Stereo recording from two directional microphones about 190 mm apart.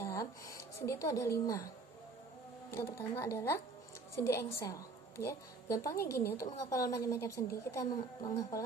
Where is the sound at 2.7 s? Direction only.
15° left (ahead or behind).